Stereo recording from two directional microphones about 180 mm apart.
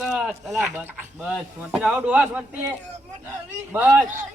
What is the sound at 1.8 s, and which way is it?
Speech, 5° right (ahead or behind).